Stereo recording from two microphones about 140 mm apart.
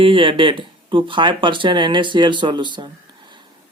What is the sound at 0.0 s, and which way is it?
Speech, 40° right (ahead or behind).